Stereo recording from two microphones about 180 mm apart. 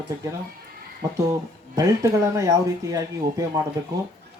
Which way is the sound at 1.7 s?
20° right (ahead or behind).